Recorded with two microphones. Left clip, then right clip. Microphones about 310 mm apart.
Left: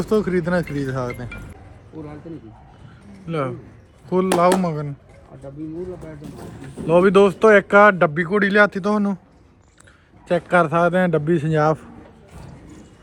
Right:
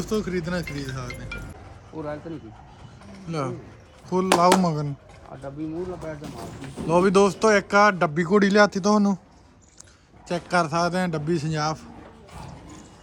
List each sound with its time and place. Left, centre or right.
0.0 s a man's voice: centre
3.1 s a sound: centre
4.1 s a man's voice: centre
4.6 s speech: centre
5.3 s speech: right
6.2 s speech: centre
10.2 s a man's voice: centre
12.3 s a sound: centre